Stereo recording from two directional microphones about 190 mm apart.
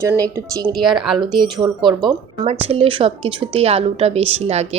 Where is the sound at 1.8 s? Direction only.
25° right (ahead or behind).